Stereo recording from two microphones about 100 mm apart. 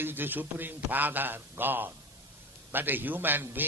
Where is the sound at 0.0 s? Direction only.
20° right (ahead or behind).